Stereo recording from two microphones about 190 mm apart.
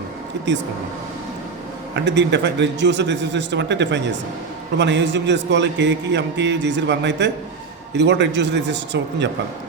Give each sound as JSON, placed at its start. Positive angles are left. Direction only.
{"t": 2.0, "sound": "a man's voice", "side_deg": -65}